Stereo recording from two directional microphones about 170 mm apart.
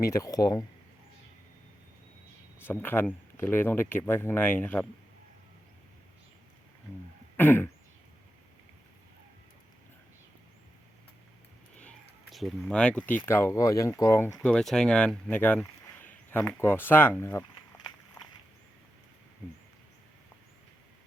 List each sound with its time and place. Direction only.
0.0 s speech: 20° left (ahead or behind)
2.6 s speech: 15° left (ahead or behind)
7.3 s speech: 10° left (ahead or behind)
12.3 s speech: centre (ahead or behind); by 14.3 s 20° left (ahead or behind)
14.3 s speech: 5° left (ahead or behind)